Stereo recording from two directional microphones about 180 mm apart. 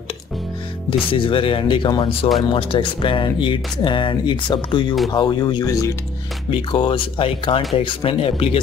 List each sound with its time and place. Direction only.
0.8 s speech: 30° left (ahead or behind)